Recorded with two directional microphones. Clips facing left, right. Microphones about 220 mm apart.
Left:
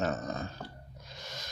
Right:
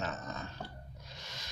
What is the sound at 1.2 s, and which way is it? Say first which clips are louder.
Scrape: left 7 dB; 45° left (ahead or behind).